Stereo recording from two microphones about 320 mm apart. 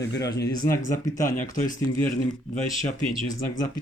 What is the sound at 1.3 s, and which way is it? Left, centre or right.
Speech, left.